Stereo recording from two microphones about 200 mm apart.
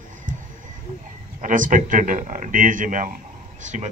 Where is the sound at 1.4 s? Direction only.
40° right (ahead or behind).